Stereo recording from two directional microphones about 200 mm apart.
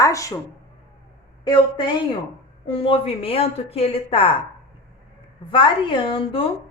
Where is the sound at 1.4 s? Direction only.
20° left (ahead or behind).